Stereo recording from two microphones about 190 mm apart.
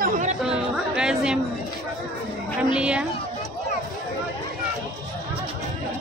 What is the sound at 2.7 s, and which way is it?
Speech, 5° right (ahead or behind).